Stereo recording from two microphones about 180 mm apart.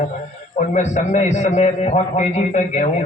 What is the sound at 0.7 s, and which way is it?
A man's voice, 40° left (ahead or behind).